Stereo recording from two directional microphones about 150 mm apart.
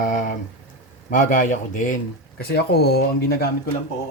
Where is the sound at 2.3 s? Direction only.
90° left.